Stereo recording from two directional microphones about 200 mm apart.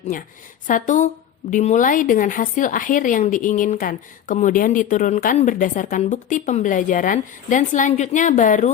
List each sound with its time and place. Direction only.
0.7 s a woman's voice: 40° left (ahead or behind)